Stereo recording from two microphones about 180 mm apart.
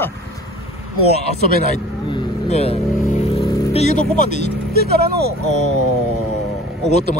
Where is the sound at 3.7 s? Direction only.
40° left (ahead or behind).